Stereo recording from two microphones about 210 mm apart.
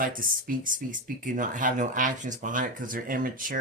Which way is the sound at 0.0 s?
40° right (ahead or behind).